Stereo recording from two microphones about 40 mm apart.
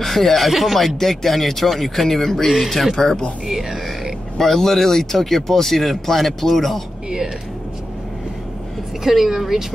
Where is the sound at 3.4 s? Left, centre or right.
Centre.